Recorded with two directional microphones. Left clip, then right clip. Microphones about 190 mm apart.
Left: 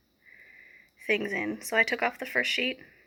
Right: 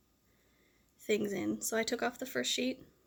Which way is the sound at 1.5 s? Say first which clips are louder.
Left 12 dB; 30° right (ahead or behind).